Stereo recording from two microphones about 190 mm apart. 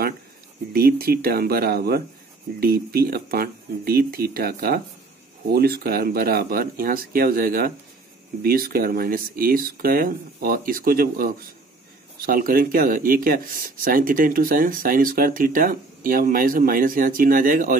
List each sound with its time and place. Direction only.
0.7 s speech: 50° right (ahead or behind)